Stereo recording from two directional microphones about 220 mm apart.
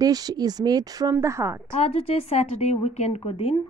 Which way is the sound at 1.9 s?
30° left (ahead or behind).